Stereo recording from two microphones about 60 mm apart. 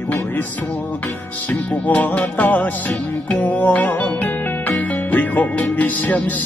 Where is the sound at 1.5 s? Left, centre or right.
Left.